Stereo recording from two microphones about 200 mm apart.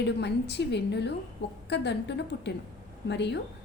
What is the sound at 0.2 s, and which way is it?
A woman's voice, 60° left (ahead or behind).